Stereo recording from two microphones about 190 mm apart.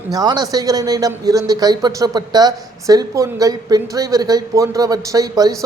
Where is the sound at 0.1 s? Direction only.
20° right (ahead or behind).